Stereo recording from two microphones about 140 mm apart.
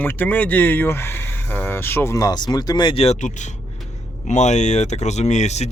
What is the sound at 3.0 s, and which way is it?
Speech, 55° left (ahead or behind).